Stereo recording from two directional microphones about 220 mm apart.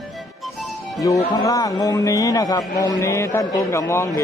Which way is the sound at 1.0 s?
15° left (ahead or behind).